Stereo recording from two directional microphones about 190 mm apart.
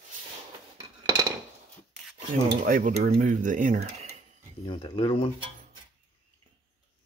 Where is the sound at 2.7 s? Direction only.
45° right (ahead or behind).